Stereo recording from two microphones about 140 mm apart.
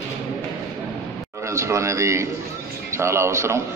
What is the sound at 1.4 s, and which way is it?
A man's voice, 20° right (ahead or behind).